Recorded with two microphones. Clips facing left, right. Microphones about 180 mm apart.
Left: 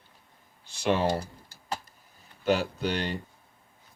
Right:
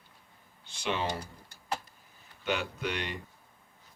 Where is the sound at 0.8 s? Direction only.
40° left (ahead or behind).